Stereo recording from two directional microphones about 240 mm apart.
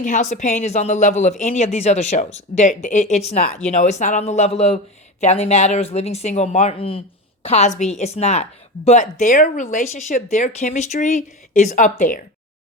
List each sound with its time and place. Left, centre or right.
0.0 s a woman's voice: left